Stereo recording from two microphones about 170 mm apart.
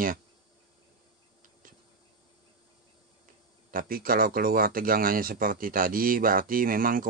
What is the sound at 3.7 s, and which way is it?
Speech, 60° right (ahead or behind).